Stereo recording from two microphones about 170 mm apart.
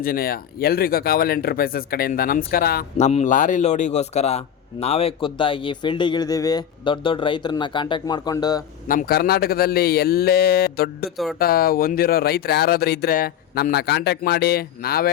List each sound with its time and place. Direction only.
0.0 s speech: 60° left (ahead or behind)
3.0 s a man's voice: 40° left (ahead or behind); by 8.6 s 20° left (ahead or behind)
8.9 s speech: 60° left (ahead or behind)